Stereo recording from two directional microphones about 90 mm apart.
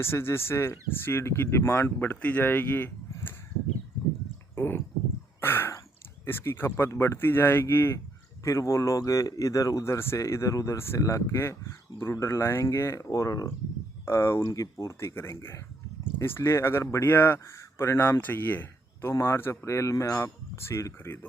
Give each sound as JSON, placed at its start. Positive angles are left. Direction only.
{"t": 0.0, "sound": "speech", "side_deg": 25}
{"t": 4.5, "sound": "a sound", "side_deg": 25}
{"t": 6.2, "sound": "speech", "side_deg": 25}
{"t": 13.1, "sound": "speech", "side_deg": 40}